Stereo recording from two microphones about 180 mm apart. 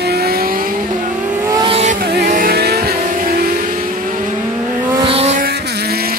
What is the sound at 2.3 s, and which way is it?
Vehicle, 55° right (ahead or behind).